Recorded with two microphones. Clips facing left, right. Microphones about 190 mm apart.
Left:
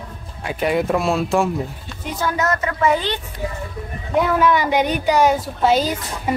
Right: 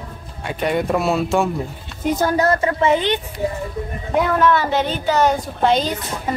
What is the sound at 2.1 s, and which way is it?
A woman's voice, 40° right (ahead or behind).